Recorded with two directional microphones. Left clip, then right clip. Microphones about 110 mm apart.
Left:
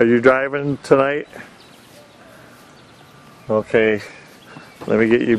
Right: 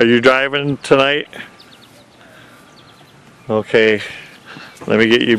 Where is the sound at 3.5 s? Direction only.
30° right (ahead or behind).